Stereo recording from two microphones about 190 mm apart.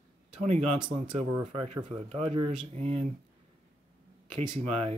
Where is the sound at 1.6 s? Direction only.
30° right (ahead or behind).